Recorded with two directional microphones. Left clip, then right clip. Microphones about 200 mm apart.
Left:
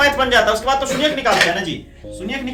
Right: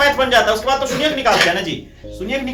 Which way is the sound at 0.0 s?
30° left (ahead or behind).